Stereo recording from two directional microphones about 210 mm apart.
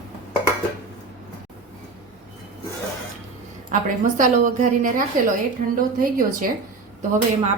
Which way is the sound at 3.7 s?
40° right (ahead or behind).